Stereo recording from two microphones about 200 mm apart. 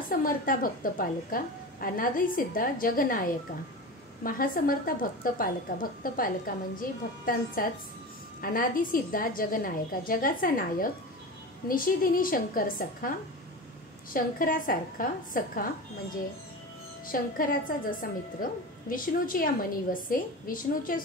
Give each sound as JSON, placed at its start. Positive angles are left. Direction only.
{"t": 0.1, "sound": "a woman's voice", "side_deg": 45}
{"t": 14.1, "sound": "a woman's voice", "side_deg": 45}
{"t": 17.1, "sound": "a woman's voice", "side_deg": 45}